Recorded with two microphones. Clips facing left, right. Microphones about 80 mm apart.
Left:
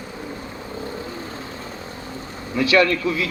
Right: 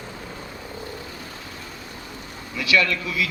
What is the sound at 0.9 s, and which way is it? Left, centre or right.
Vehicle, left.